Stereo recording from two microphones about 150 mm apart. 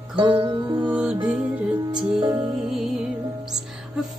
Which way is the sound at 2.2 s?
25° right (ahead or behind).